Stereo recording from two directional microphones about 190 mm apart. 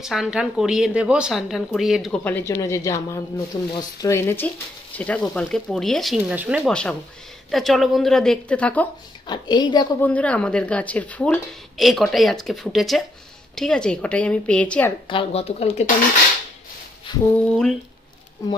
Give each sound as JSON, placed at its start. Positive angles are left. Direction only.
{"t": 0.0, "sound": "speech", "side_deg": -5}
{"t": 9.3, "sound": "a woman's voice", "side_deg": 25}
{"t": 10.0, "sound": "speech", "side_deg": 5}
{"t": 15.0, "sound": "speech", "side_deg": 30}
{"t": 17.3, "sound": "speech", "side_deg": 5}